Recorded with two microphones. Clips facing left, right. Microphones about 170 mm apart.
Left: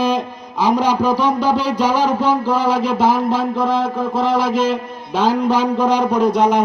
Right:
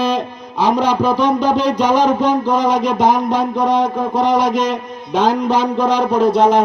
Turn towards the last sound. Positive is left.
turn(degrees=10)  # may be behind; listen again after turning